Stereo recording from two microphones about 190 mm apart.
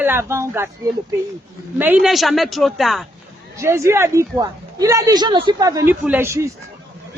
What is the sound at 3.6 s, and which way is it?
A woman's voice, 15° right (ahead or behind).